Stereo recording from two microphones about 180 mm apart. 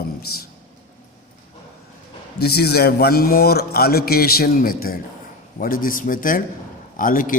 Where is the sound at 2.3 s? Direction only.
60° left (ahead or behind).